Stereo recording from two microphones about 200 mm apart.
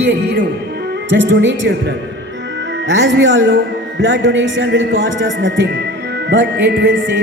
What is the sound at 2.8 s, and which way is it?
A man's voice, 65° right (ahead or behind).